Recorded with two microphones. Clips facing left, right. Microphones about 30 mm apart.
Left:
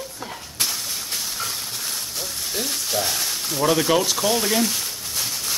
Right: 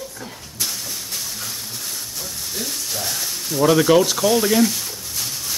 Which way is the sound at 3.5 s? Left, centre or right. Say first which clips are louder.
Right 5 dB; centre.